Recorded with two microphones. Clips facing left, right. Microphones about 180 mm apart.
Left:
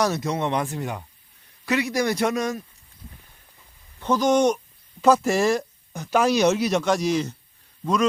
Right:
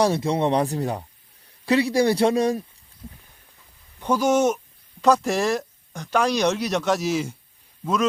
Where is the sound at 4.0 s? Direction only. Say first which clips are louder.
Even; 10° right (ahead or behind).